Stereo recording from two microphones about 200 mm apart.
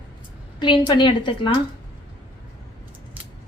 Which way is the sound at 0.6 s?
20° left (ahead or behind).